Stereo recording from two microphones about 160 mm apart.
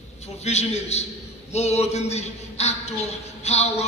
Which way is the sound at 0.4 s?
45° left (ahead or behind).